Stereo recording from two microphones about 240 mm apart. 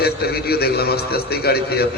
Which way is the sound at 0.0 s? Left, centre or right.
Left.